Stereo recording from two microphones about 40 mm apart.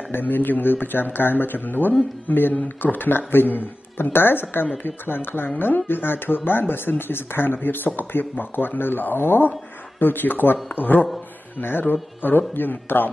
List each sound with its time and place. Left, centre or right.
0.1 s speech: left
9.9 s speech: left